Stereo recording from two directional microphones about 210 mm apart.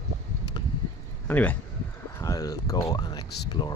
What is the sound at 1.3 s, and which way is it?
Speech, 10° left (ahead or behind).